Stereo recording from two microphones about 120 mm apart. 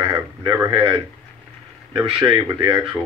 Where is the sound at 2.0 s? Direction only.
40° right (ahead or behind).